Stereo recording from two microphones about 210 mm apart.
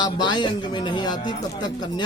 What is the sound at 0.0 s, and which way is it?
Speech, 20° left (ahead or behind).